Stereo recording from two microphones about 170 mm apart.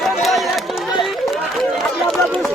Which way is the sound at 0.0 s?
Centre (ahead or behind).